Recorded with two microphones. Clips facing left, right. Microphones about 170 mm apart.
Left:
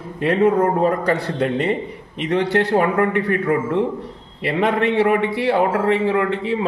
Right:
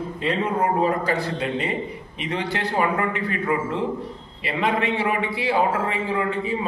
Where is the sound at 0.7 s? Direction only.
65° left (ahead or behind).